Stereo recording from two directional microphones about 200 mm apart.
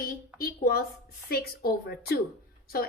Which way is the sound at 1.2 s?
50° left (ahead or behind).